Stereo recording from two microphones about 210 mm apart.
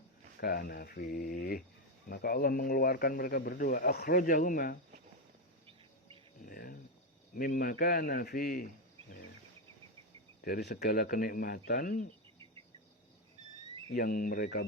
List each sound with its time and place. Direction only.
0.3 s a man's voice: 45° left (ahead or behind)
6.4 s cricket: 45° left (ahead or behind)
7.3 s a man's voice: 45° left (ahead or behind)
10.4 s a man's voice: 50° left (ahead or behind)
11.7 s cricket: 40° left (ahead or behind)
13.9 s a man's voice: 45° left (ahead or behind)